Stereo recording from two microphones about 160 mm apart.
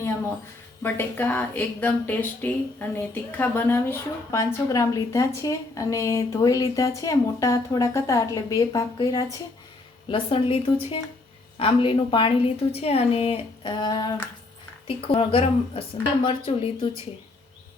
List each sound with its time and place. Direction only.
0.8 s speech: 15° left (ahead or behind)
10.1 s a woman's voice: 35° left (ahead or behind)
11.6 s a woman's voice: 35° left (ahead or behind)